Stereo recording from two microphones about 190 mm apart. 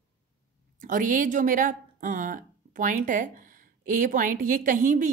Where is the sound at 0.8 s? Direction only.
45° right (ahead or behind).